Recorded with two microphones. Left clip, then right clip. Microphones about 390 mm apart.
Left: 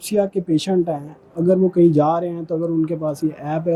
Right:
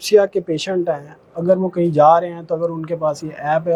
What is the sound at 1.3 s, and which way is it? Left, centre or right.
Speech, right.